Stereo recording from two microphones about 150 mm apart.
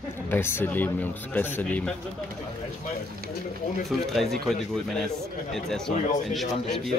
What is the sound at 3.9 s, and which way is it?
Speech, centre (ahead or behind).